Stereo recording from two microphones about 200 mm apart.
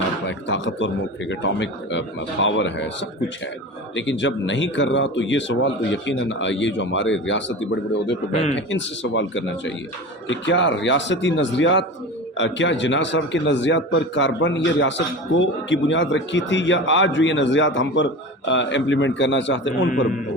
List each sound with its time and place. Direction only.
0.3 s a man's voice: 65° left (ahead or behind)
8.3 s speech: 30° left (ahead or behind)
8.5 s a man's voice: 70° left (ahead or behind)